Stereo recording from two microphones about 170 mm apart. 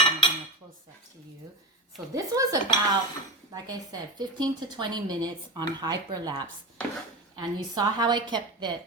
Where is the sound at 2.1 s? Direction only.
20° right (ahead or behind).